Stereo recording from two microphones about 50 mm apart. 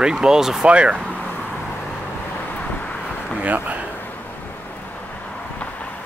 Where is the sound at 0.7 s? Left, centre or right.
Right.